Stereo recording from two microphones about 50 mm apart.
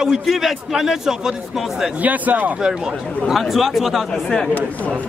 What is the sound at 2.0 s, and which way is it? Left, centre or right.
Speech, right.